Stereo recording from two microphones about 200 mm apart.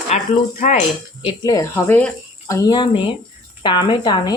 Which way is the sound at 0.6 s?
40° left (ahead or behind).